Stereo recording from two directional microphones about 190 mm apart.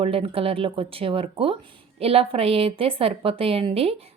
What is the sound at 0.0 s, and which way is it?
A woman's voice, 30° right (ahead or behind).